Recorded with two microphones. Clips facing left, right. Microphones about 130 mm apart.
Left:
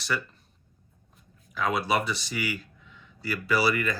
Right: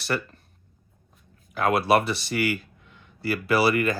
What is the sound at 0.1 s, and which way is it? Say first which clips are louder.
Speech: right 3 dB; 55° right (ahead or behind).